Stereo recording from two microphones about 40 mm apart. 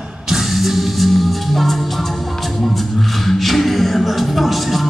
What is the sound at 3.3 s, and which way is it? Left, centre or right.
Music, centre.